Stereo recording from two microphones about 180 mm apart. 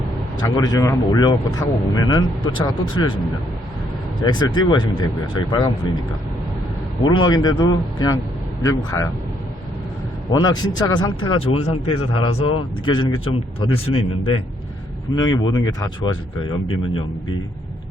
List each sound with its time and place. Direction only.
0.4 s a man's voice: 20° left (ahead or behind)
4.2 s a man's voice: 25° left (ahead or behind)
7.0 s a man's voice: 25° left (ahead or behind)
10.2 s a man's voice: 20° left (ahead or behind)